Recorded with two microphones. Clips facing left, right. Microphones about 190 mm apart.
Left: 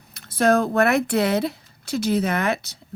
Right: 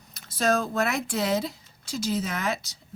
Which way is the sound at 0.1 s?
60° left (ahead or behind).